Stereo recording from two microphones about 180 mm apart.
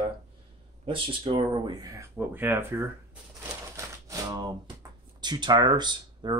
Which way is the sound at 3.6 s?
15° right (ahead or behind).